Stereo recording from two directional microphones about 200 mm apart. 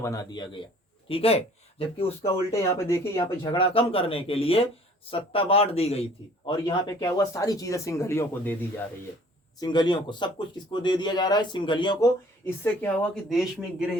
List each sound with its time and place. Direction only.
0.0 s speech: 15° left (ahead or behind)
2.2 s a man's voice: 15° left (ahead or behind)
3.5 s a man's voice: 30° left (ahead or behind); by 8.5 s 10° left (ahead or behind)
9.6 s speech: 20° left (ahead or behind)
12.5 s speech: 10° left (ahead or behind)